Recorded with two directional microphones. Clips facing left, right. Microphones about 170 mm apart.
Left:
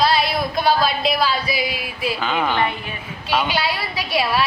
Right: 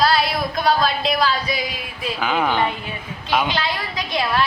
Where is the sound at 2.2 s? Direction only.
10° right (ahead or behind).